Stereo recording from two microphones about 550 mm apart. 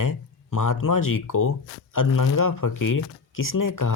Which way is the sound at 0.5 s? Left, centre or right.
Left.